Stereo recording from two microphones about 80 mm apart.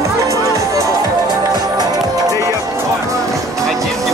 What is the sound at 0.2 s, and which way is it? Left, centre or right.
Music, right.